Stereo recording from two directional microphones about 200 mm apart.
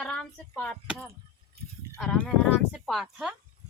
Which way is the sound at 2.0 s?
5° left (ahead or behind).